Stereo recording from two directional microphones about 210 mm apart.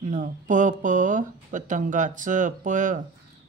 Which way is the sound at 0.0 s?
35° right (ahead or behind).